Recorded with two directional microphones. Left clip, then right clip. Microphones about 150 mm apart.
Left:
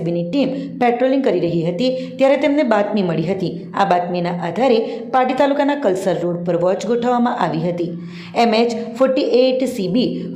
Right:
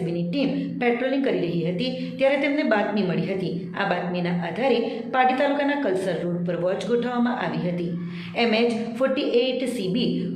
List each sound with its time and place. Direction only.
0.1 s a woman's voice: 50° left (ahead or behind)
9.0 s a woman's voice: 50° left (ahead or behind)